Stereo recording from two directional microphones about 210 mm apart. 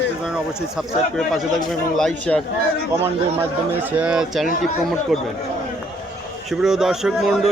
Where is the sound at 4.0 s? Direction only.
5° right (ahead or behind).